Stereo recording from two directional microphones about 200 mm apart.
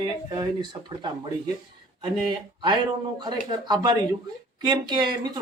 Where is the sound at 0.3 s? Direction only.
20° right (ahead or behind).